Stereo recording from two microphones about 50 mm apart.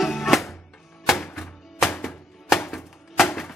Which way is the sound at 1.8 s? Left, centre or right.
Centre.